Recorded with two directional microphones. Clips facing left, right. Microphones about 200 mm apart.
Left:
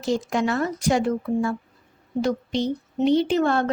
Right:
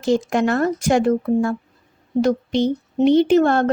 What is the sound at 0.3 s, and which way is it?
Speech, 55° right (ahead or behind).